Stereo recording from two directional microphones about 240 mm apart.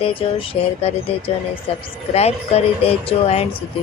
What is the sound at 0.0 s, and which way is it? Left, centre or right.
A woman's voice, left.